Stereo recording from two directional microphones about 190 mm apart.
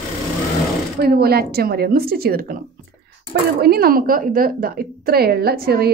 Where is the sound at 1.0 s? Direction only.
55° right (ahead or behind).